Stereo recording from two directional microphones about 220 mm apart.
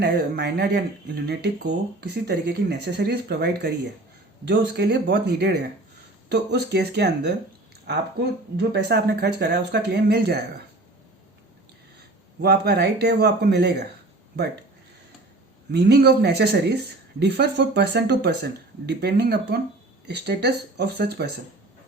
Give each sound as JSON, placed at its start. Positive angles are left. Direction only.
{"t": 0.0, "sound": "speech", "side_deg": -50}
{"t": 12.4, "sound": "speech", "side_deg": -45}
{"t": 15.7, "sound": "speech", "side_deg": -50}